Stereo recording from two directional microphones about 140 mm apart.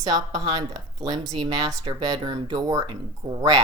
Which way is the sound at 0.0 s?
30° right (ahead or behind).